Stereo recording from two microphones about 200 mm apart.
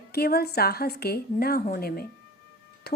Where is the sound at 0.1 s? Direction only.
50° left (ahead or behind).